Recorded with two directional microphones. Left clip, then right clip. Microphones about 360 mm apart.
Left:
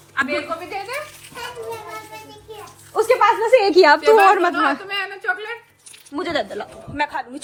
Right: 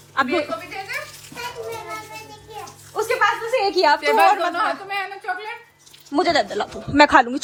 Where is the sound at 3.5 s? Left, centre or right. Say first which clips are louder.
Left 7 dB; left.